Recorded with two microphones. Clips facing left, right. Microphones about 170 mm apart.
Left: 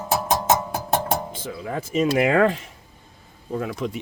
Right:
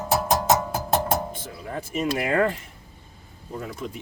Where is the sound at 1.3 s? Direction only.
90° left.